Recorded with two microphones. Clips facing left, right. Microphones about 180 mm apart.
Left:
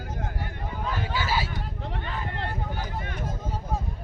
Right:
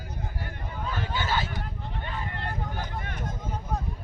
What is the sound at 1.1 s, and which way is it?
Speech, 10° left (ahead or behind).